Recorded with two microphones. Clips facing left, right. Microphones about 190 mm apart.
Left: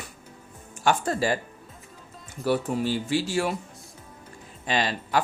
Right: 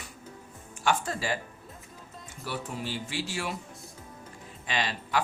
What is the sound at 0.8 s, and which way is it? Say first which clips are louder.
Speech: left 5 dB; 45° left (ahead or behind).